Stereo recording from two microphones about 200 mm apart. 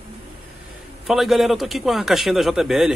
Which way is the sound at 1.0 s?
Centre (ahead or behind).